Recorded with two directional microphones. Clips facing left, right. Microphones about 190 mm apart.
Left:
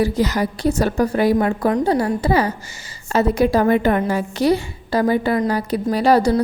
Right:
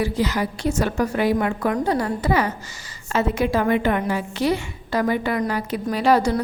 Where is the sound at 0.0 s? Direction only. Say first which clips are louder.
Left 4 dB; 40° left (ahead or behind).